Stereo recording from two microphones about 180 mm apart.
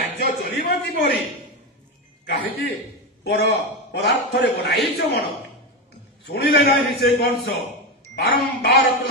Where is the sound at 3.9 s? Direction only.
70° left (ahead or behind).